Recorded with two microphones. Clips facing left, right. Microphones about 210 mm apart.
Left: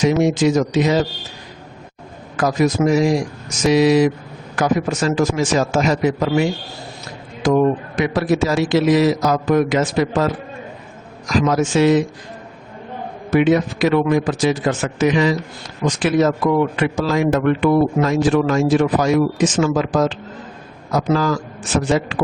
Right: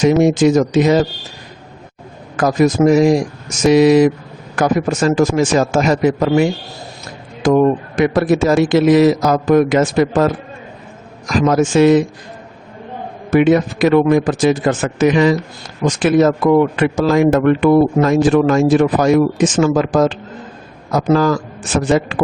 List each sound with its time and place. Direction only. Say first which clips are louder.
0.0 s speech: right 4 dB; 50° right (ahead or behind)
2.3 s speech: right 4 dB; 50° right (ahead or behind)
13.3 s speech: right 3 dB; 50° right (ahead or behind)